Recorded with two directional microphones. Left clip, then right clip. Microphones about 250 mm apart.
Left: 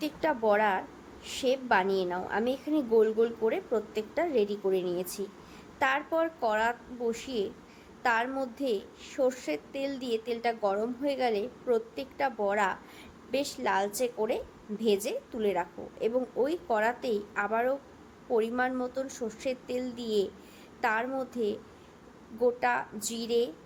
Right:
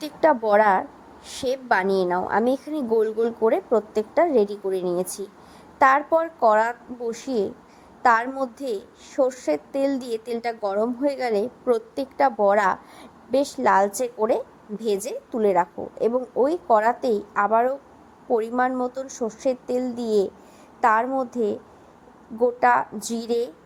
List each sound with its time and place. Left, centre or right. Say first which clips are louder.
0.0 s a woman's voice: right 9 dB; right